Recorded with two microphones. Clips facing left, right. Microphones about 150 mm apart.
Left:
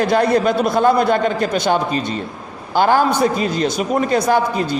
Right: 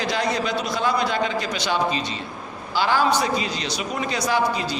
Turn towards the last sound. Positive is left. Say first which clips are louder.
# left 5 dB
turn(degrees=50)  # may be behind; listen again after turning